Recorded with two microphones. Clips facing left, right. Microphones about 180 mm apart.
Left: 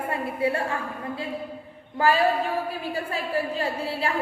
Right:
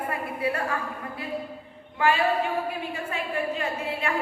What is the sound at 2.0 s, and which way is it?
A woman's voice, 35° left (ahead or behind).